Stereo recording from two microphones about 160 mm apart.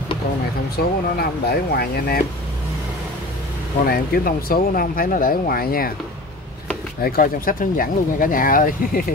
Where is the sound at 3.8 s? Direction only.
70° left (ahead or behind).